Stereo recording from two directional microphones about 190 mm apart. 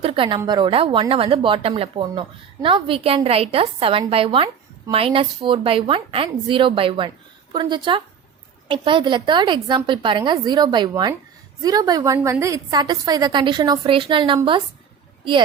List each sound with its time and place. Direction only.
0.0 s a woman's voice: 30° right (ahead or behind)